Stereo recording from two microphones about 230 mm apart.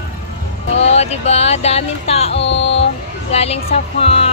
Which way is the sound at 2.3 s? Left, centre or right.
Left.